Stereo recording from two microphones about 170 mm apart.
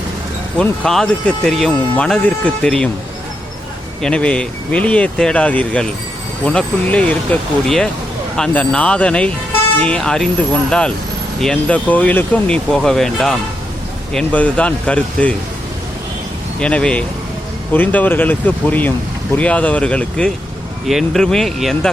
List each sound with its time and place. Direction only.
0.6 s speech: 5° left (ahead or behind)
4.0 s speech: 5° left (ahead or behind)
16.6 s speech: 5° left (ahead or behind)